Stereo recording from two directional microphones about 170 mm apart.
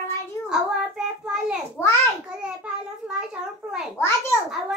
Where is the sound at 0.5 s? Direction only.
5° right (ahead or behind).